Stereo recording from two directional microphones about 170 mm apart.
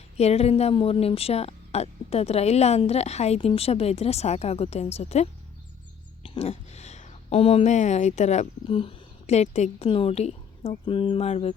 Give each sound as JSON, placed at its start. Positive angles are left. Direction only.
{"t": 0.2, "sound": "speech", "side_deg": 40}